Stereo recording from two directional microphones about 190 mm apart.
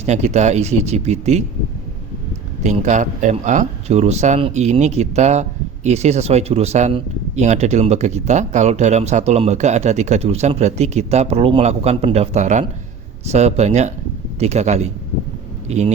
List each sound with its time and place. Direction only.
0.0 s speech: 35° right (ahead or behind)
2.6 s speech: 40° right (ahead or behind)